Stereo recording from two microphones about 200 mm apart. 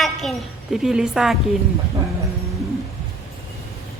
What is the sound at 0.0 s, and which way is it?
A woman's voice, centre (ahead or behind).